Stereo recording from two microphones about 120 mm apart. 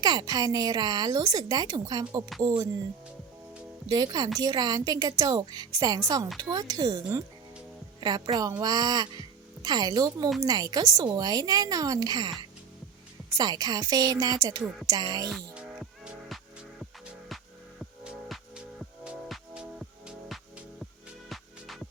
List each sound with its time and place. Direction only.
0.0 s speech: 35° right (ahead or behind)
3.8 s speech: 35° right (ahead or behind)
13.3 s speech: 35° right (ahead or behind)
17.2 s music: centre (ahead or behind)
20.1 s music: centre (ahead or behind)